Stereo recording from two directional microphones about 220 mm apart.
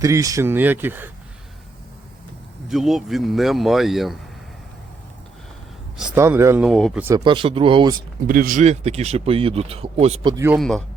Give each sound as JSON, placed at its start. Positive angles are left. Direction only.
{"t": 0.0, "sound": "speech", "side_deg": -15}
{"t": 2.6, "sound": "speech", "side_deg": 0}
{"t": 6.0, "sound": "speech", "side_deg": -10}
{"t": 6.7, "sound": "speech", "side_deg": 0}
{"t": 7.3, "sound": "speech", "side_deg": -25}
{"t": 8.3, "sound": "speech", "side_deg": -40}
{"t": 10.3, "sound": "speech", "side_deg": -10}
{"t": 10.6, "sound": "speech", "side_deg": 0}